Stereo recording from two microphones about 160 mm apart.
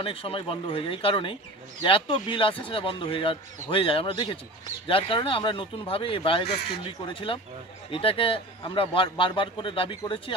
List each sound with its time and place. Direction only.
0.0 s a man's voice: 35° left (ahead or behind)